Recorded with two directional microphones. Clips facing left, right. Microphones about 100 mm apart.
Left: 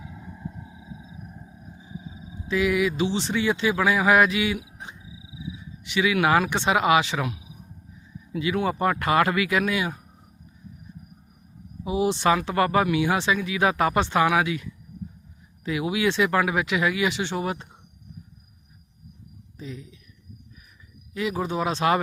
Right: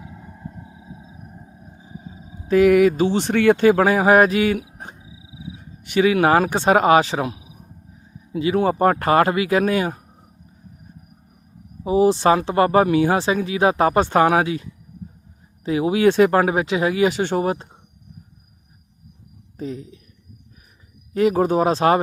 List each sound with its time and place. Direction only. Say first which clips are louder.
0.0 s vehicle: right 1 dB; 5° right (ahead or behind)
0.9 s a sound: right 1 dB; 40° right (ahead or behind)
1.3 s a sound: right 1 dB; 25° right (ahead or behind); by 2.3 s 45° right (ahead or behind)
2.5 s speech: right 9 dB; 50° right (ahead or behind)
4.9 s dog: right 1 dB; 30° right (ahead or behind)
5.4 s speech: even; 50° right (ahead or behind)
11.8 s speech: right 7 dB; 40° right (ahead or behind)
19.5 s speech: right 8 dB; 40° right (ahead or behind)
21.1 s speech: right 10 dB; 45° right (ahead or behind)